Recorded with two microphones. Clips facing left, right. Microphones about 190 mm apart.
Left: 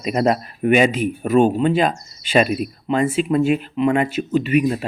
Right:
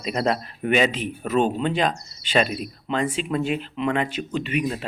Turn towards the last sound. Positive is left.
turn(degrees=5)  # may be behind; listen again after turning